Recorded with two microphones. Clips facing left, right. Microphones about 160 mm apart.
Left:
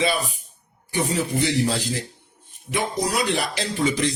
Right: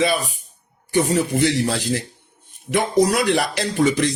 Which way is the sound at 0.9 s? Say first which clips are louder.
Right 5 dB; 60° right (ahead or behind).